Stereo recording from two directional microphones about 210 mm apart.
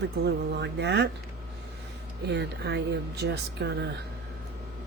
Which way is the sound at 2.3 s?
55° right (ahead or behind).